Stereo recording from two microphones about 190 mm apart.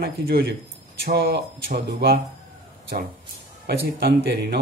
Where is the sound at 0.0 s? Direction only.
60° right (ahead or behind).